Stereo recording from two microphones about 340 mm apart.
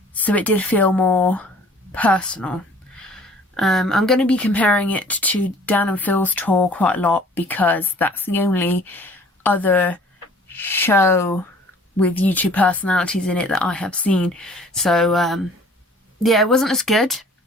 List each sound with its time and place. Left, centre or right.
0.2 s a woman's voice: centre